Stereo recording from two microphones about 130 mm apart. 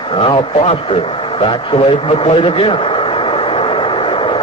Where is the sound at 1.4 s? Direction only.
45° left (ahead or behind).